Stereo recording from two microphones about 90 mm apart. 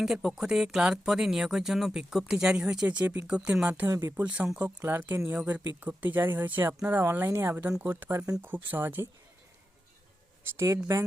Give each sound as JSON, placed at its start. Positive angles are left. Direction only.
{"t": 0.0, "sound": "speech", "side_deg": -5}
{"t": 4.8, "sound": "speech", "side_deg": -25}
{"t": 10.9, "sound": "a woman's voice", "side_deg": -30}